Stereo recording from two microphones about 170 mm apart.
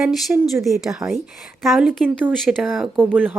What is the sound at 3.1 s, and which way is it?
Speech, 10° right (ahead or behind).